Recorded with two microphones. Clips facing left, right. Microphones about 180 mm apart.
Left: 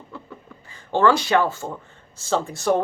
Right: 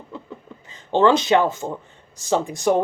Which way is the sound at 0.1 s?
20° right (ahead or behind).